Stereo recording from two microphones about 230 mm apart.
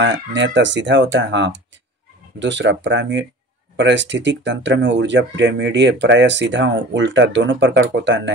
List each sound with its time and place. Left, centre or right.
0.0 s speech: right